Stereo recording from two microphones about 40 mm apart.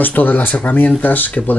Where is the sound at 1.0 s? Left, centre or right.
Left.